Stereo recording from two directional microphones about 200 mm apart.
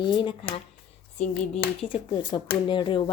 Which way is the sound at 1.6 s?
25° left (ahead or behind).